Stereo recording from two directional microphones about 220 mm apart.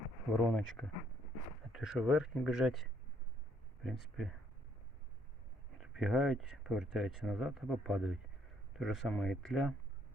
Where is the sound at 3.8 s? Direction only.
Centre (ahead or behind).